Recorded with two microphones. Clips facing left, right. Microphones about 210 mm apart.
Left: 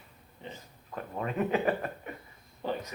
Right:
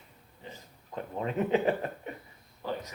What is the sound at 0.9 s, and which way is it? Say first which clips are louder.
Speech: right 1 dB; 25° right (ahead or behind).